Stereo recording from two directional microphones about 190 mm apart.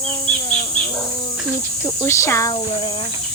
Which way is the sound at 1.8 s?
15° left (ahead or behind).